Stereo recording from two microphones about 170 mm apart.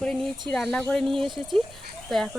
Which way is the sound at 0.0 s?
Centre (ahead or behind).